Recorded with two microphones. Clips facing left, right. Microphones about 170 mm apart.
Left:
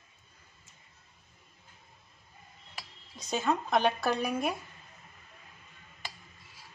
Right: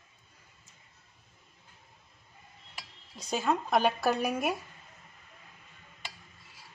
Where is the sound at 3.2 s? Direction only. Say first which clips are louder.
Even; 5° right (ahead or behind).